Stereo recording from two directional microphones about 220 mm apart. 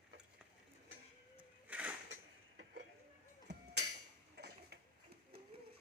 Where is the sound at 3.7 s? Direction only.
85° right.